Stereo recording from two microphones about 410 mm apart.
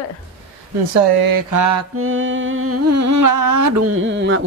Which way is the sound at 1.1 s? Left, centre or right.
Right.